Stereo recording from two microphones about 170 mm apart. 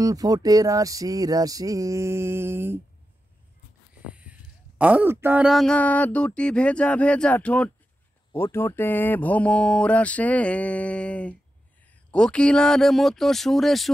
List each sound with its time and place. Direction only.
0.0 s speech: 20° right (ahead or behind)
4.1 s speech: 5° right (ahead or behind)